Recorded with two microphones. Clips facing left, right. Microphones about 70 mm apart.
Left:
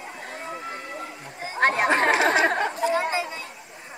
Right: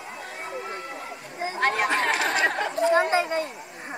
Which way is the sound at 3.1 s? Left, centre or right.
Right.